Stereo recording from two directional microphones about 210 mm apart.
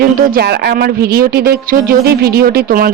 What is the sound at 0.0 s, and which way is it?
Speech, 45° right (ahead or behind).